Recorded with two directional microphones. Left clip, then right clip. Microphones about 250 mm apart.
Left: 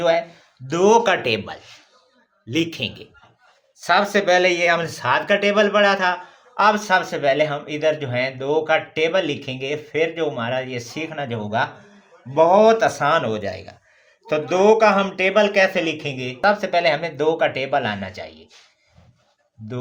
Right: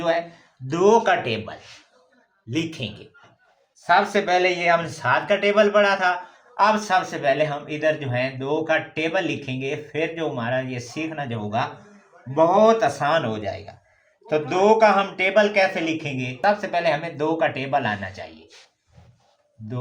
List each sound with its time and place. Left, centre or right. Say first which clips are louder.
0.7 s speech: left 2 dB; left